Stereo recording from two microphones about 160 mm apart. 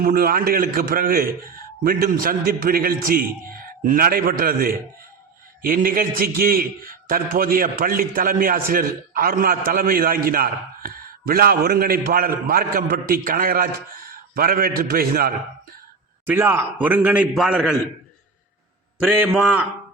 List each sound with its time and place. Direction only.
0.0 s a man's voice: 65° right (ahead or behind)
16.2 s a man's voice: 15° right (ahead or behind)
19.3 s a man's voice: 5° right (ahead or behind)